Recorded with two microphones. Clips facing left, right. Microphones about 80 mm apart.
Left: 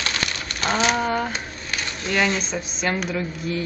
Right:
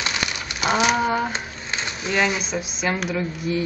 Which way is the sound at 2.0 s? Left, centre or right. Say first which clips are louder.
Even; centre.